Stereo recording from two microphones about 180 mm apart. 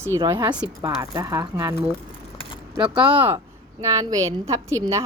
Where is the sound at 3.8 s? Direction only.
20° right (ahead or behind).